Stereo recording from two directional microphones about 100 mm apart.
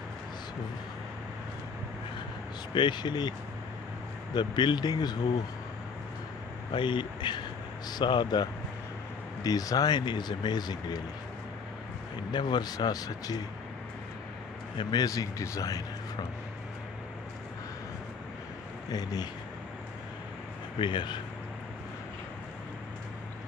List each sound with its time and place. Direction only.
2.7 s speech: 50° left (ahead or behind)
6.7 s speech: 55° left (ahead or behind)
12.3 s speech: 45° left (ahead or behind)
14.8 s a man's voice: 45° left (ahead or behind)
18.9 s a man's voice: 40° left (ahead or behind)
20.8 s speech: 50° left (ahead or behind)